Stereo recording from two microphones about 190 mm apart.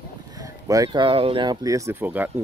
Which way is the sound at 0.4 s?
20° right (ahead or behind).